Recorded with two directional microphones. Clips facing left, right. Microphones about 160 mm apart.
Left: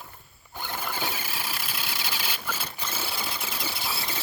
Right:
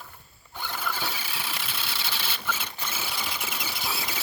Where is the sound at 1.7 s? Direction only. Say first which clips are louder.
Left 1 dB; 10° left (ahead or behind); by 3.7 s 5° right (ahead or behind).